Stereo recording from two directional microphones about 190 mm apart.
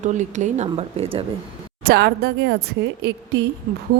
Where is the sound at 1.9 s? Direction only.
60° right (ahead or behind).